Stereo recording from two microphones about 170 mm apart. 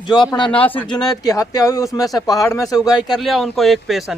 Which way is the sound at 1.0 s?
20° left (ahead or behind).